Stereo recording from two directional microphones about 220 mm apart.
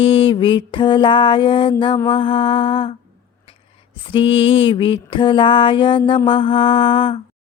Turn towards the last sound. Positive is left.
turn(degrees=20)  # may be behind; listen again after turning